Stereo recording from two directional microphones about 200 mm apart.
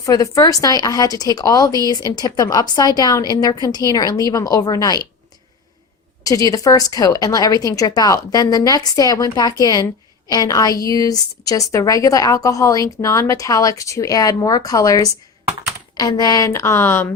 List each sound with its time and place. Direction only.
0.0 s a woman's voice: 15° left (ahead or behind)
6.2 s a woman's voice: 15° left (ahead or behind)